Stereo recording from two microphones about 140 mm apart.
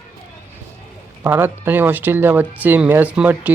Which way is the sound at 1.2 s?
15° right (ahead or behind).